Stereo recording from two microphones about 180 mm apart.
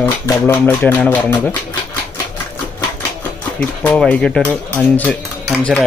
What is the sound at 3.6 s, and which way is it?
A man's voice, 5° left (ahead or behind).